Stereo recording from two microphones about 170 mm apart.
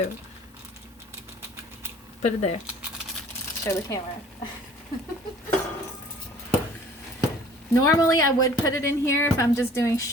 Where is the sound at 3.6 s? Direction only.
20° left (ahead or behind).